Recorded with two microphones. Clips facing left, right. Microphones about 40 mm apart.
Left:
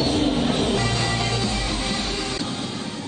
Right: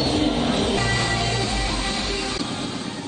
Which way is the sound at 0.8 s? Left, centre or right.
Right.